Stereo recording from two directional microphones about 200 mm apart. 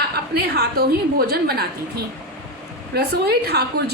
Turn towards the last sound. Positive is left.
turn(degrees=-50)  # may be behind; listen again after turning